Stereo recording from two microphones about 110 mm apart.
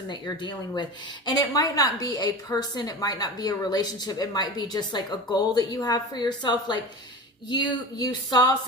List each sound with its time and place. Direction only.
0.1 s a woman's voice: 45° left (ahead or behind)